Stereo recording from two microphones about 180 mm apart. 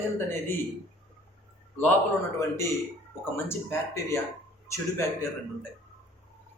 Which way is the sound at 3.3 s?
15° left (ahead or behind).